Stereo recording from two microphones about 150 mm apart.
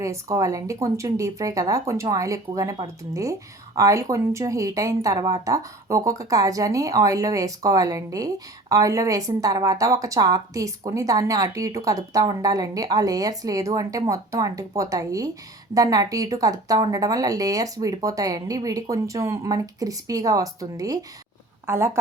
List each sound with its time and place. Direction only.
0.0 s a woman's voice: 20° right (ahead or behind)